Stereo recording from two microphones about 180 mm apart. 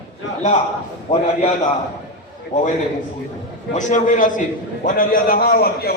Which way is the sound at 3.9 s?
45° left (ahead or behind).